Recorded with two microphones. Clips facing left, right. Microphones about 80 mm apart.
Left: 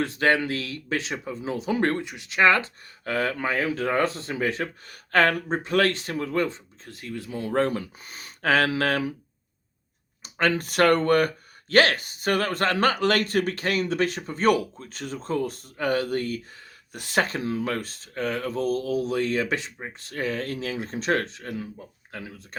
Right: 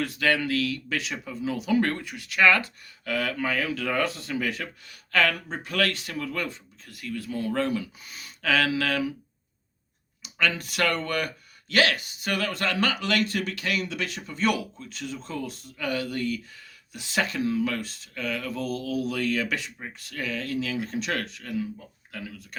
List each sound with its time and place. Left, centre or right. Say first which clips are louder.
0.0 s speech: left 3 dB; left
7.5 s speech: left 5 dB; left
10.2 s speech: left 4 dB; left
22.1 s speech: even; left